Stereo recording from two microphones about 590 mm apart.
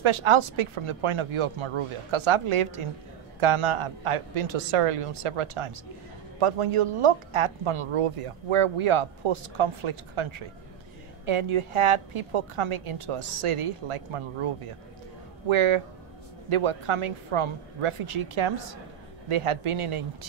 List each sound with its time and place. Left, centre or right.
0.0 s speech: right